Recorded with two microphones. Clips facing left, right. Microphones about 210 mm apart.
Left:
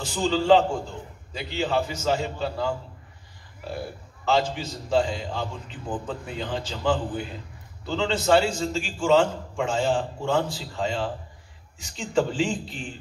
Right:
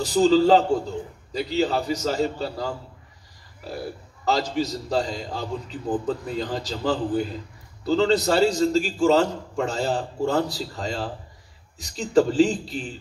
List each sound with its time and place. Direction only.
0.0 s a man's voice: 35° right (ahead or behind)
4.2 s a man's voice: 40° right (ahead or behind)